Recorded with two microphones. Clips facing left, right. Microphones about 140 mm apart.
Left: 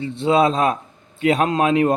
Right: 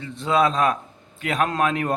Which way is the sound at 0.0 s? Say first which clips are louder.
Left 4 dB; 30° left (ahead or behind).